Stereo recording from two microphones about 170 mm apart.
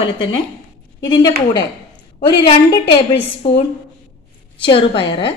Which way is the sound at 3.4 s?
30° left (ahead or behind).